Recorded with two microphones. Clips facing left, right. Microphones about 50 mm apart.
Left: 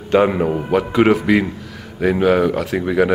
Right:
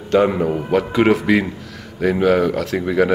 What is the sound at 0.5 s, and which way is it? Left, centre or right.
Speech, centre.